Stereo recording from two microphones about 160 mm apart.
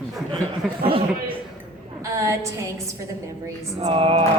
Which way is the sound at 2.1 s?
20° right (ahead or behind).